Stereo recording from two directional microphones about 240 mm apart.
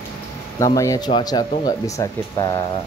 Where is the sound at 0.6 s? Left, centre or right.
Centre.